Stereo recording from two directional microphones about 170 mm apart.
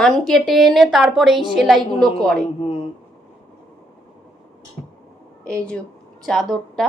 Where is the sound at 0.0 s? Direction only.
Centre (ahead or behind).